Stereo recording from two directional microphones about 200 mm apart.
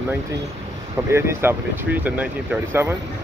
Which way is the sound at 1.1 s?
10° right (ahead or behind).